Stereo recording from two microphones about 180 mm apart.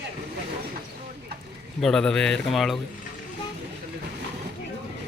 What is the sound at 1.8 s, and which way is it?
A man's voice, 5° left (ahead or behind).